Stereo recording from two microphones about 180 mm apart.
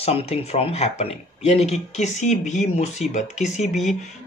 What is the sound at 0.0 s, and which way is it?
Speech, 35° left (ahead or behind).